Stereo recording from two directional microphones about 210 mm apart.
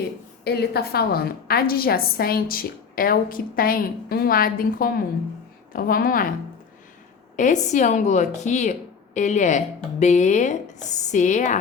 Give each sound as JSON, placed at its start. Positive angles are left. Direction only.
{"t": 0.4, "sound": "a woman's voice", "side_deg": 50}
{"t": 7.3, "sound": "a woman's voice", "side_deg": 35}